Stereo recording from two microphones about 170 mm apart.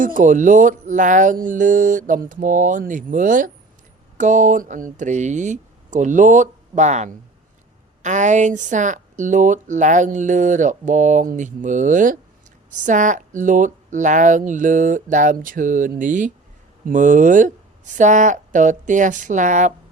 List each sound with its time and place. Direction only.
0.0 s speech: 50° right (ahead or behind)